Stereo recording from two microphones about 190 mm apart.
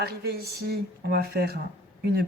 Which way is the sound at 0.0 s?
55° right (ahead or behind).